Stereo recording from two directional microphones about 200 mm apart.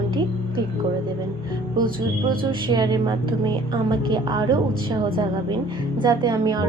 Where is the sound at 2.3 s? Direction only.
20° right (ahead or behind).